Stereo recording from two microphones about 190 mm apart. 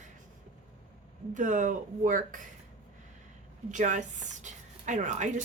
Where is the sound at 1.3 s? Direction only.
40° right (ahead or behind).